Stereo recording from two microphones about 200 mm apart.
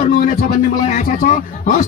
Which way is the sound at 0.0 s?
40° left (ahead or behind).